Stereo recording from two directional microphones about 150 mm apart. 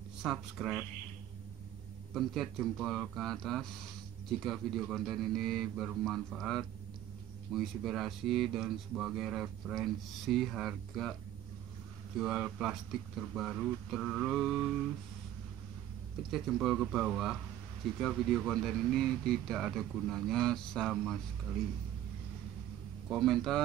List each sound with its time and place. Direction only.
0.2 s speech: 5° right (ahead or behind)
2.1 s speech: centre (ahead or behind)
12.2 s speech: 5° right (ahead or behind)
16.2 s speech: centre (ahead or behind)
23.0 s speech: centre (ahead or behind)